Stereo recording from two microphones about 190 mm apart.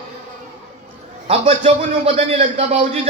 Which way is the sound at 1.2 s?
35° right (ahead or behind).